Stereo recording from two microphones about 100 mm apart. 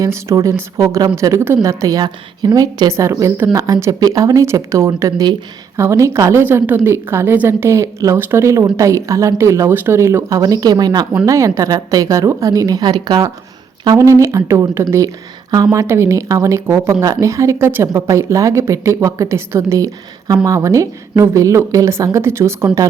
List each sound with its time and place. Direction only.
0.0 s a woman's voice: 30° right (ahead or behind)
11.3 s a woman's voice: 30° right (ahead or behind)
13.8 s speech: 35° right (ahead or behind)
15.4 s a woman's voice: 40° right (ahead or behind)
15.7 s a woman's voice: 30° right (ahead or behind)